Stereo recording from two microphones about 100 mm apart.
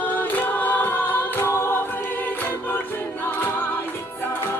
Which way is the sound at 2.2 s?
20° left (ahead or behind).